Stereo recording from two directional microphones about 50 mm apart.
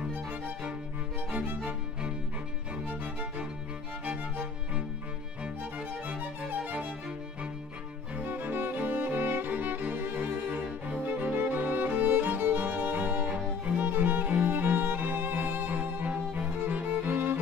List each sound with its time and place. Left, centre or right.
0.1 s music: right
1.7 s music: centre
2.9 s music: right
6.0 s music: right
8.2 s music: right